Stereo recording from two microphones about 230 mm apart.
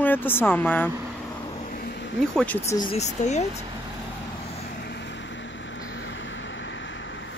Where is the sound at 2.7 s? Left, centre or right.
Left.